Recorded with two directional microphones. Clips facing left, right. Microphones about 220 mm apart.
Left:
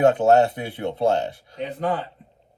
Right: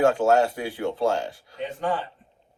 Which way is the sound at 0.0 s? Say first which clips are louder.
Left 3 dB; 20° left (ahead or behind).